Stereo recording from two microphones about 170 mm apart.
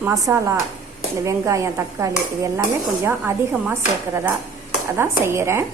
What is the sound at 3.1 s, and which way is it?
Speech, 10° right (ahead or behind).